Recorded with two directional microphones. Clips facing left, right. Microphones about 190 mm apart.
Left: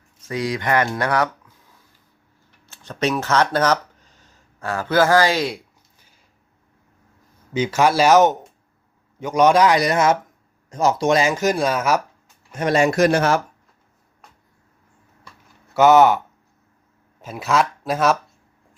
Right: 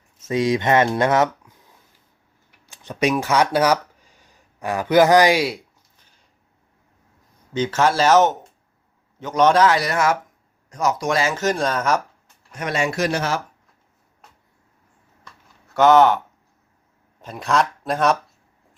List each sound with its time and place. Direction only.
0.3 s speech: 20° right (ahead or behind)
2.6 s speech: 15° right (ahead or behind)
7.5 s speech: 10° left (ahead or behind)
12.5 s speech: 35° left (ahead or behind); by 13.4 s 55° left (ahead or behind)
15.7 s speech: 10° left (ahead or behind)